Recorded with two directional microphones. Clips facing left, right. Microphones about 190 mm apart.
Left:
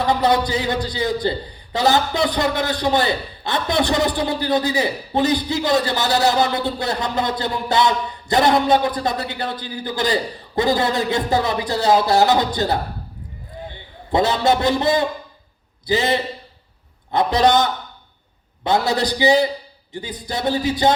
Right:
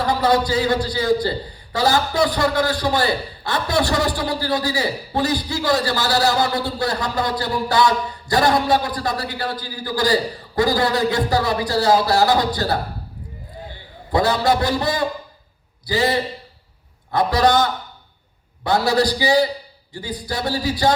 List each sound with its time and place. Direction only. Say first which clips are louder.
0.0 s a man's voice: even; 20° left (ahead or behind)
14.1 s a man's voice: left 1 dB; 20° left (ahead or behind)